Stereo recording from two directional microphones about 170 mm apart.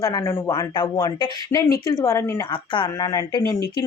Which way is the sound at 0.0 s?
20° left (ahead or behind).